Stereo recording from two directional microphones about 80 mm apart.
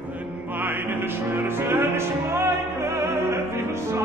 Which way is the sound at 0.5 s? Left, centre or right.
Right.